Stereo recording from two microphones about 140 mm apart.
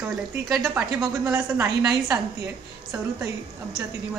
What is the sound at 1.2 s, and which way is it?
Speech, 20° right (ahead or behind).